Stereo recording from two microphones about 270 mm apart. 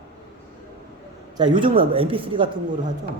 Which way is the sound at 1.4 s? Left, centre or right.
Centre.